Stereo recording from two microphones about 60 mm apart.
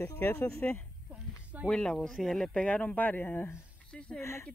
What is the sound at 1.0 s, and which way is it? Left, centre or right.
Speech, right.